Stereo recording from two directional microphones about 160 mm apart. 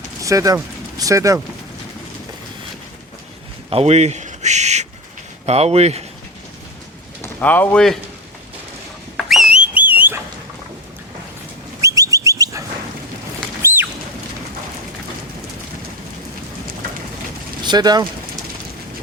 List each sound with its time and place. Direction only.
0.2 s speech: 20° right (ahead or behind)
3.7 s speech: 40° right (ahead or behind)
7.2 s speech: 10° left (ahead or behind)
9.1 s a sound: centre (ahead or behind)
11.8 s bird: 20° right (ahead or behind)
13.6 s a sound: 15° right (ahead or behind)
17.6 s speech: 25° right (ahead or behind)